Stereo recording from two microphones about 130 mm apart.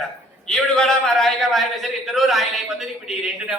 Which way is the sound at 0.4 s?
5° left (ahead or behind).